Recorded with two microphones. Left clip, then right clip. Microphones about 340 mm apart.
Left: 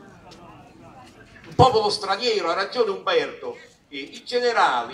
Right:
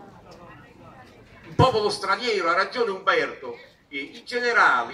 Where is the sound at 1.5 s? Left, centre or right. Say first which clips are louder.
Left 3 dB; centre.